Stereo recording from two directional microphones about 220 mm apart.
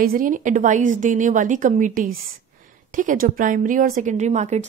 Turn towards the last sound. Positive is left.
turn(degrees=-30)  # may be behind; listen again after turning